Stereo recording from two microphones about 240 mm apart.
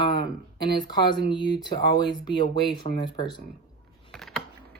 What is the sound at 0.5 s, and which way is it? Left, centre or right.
Speech, centre.